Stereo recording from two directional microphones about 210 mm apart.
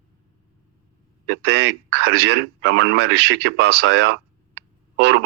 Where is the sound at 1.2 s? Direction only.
60° right (ahead or behind).